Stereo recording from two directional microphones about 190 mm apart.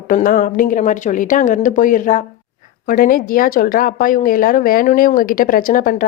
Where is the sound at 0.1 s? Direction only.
45° left (ahead or behind).